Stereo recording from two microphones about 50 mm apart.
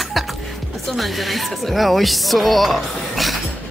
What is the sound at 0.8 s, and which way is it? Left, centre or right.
Speech, centre.